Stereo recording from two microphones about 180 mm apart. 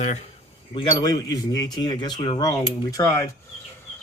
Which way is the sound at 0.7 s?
20° left (ahead or behind).